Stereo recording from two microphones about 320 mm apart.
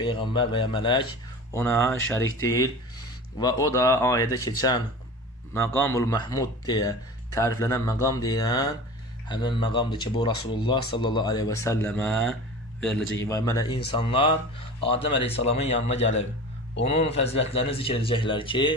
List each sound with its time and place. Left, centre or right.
0.0 s speech: centre